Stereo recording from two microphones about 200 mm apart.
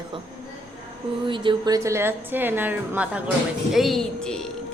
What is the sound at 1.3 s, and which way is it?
A woman's voice, 20° right (ahead or behind).